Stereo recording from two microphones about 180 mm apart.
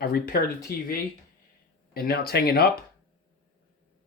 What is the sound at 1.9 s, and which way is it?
Speech, 60° left (ahead or behind).